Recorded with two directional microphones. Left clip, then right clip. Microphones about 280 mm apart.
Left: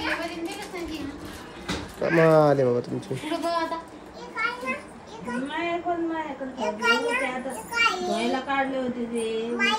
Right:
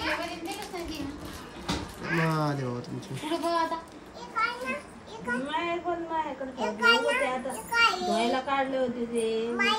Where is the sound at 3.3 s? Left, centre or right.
Right.